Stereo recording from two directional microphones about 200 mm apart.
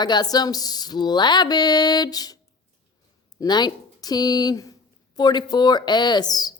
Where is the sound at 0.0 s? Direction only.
20° left (ahead or behind).